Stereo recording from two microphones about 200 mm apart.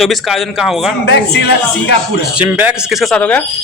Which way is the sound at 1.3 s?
55° left (ahead or behind).